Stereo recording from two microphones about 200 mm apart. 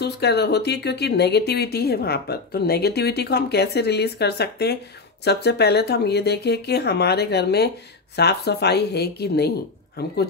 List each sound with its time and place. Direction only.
0.0 s speech: 55° left (ahead or behind)